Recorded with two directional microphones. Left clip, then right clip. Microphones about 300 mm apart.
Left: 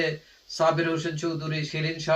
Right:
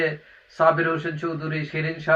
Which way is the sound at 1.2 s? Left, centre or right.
Centre.